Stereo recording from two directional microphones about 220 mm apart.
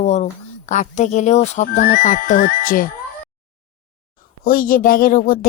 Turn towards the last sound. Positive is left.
turn(degrees=40)  # may be behind; listen again after turning